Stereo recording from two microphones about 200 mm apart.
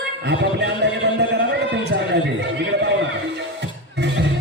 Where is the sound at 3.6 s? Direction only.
60° right (ahead or behind).